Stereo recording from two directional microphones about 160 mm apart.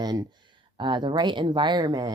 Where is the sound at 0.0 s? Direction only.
25° right (ahead or behind).